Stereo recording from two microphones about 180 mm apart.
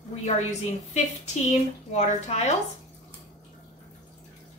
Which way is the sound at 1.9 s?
40° left (ahead or behind).